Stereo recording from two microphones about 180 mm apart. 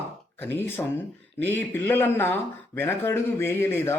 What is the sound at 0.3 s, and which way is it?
Speech, 10° left (ahead or behind).